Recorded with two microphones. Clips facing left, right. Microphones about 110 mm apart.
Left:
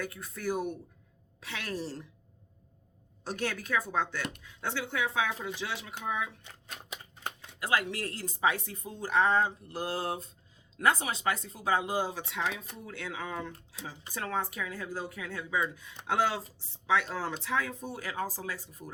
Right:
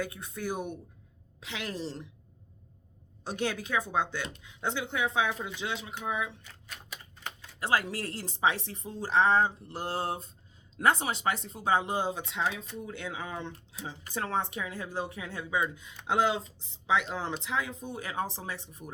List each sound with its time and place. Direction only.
0.0 s speech: 20° right (ahead or behind)
3.2 s speech: 15° right (ahead or behind)
7.6 s speech: 30° right (ahead or behind)